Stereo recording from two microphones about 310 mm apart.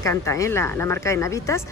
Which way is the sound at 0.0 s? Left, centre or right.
Centre.